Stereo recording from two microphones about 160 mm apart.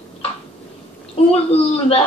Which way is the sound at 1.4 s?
40° left (ahead or behind).